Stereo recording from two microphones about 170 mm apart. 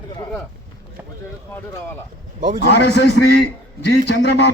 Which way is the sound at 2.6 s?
80° left.